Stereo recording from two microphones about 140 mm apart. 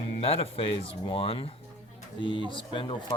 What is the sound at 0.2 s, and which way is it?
Speech, 45° left (ahead or behind).